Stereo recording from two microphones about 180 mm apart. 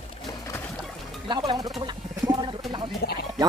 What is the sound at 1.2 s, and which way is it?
Music, 25° right (ahead or behind).